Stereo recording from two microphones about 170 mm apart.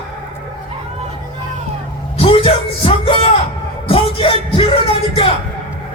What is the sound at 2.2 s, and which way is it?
A woman's voice, 35° left (ahead or behind).